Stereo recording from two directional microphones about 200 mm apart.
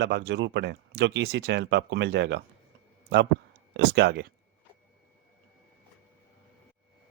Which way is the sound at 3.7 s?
55° right (ahead or behind).